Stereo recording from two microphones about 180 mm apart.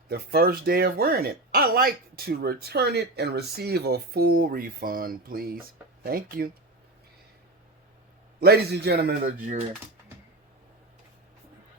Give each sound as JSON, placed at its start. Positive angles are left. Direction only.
{"t": 0.1, "sound": "speech", "side_deg": -60}
{"t": 8.4, "sound": "speech", "side_deg": -60}